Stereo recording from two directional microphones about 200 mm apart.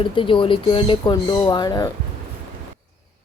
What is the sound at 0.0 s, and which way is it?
Speech, 25° left (ahead or behind).